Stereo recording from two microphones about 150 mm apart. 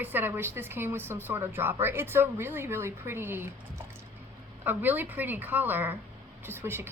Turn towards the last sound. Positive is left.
turn(degrees=-15)  # may be behind; listen again after turning